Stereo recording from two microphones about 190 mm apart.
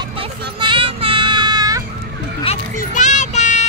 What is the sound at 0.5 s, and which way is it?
Child singing, 25° right (ahead or behind).